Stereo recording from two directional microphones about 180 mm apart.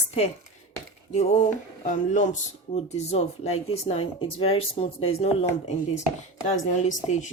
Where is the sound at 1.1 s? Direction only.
40° left (ahead or behind).